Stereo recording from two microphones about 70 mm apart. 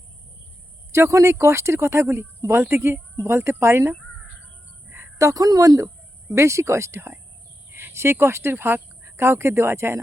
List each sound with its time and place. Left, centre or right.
0.9 s a woman's voice: right
6.2 s speech: right